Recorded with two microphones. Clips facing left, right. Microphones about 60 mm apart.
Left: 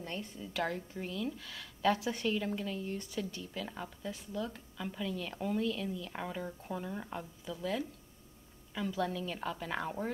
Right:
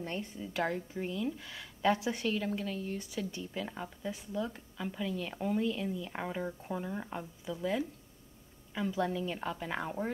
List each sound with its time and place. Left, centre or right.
0.0 s a woman's voice: right; by 3.3 s centre
3.3 s a woman's voice: centre